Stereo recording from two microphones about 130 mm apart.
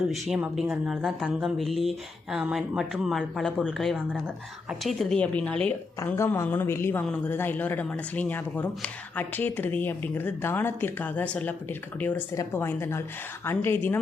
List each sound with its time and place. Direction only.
0.9 s speech: 5° right (ahead or behind); by 14.0 s 15° left (ahead or behind)